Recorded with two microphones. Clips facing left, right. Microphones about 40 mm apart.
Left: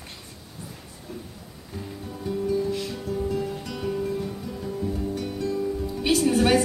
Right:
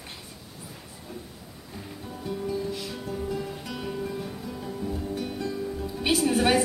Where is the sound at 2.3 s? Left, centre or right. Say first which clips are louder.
Left 5 dB; centre.